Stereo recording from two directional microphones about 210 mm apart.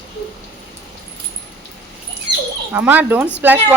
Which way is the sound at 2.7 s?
10° right (ahead or behind).